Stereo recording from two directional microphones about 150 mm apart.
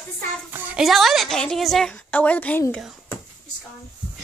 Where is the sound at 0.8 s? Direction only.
Centre (ahead or behind).